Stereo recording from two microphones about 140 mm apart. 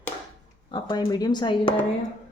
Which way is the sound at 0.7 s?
35° left (ahead or behind).